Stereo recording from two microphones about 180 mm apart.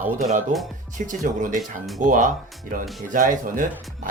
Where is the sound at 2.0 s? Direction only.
45° right (ahead or behind).